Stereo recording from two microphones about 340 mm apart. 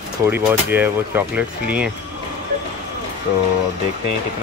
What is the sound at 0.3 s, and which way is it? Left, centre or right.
Speech, centre.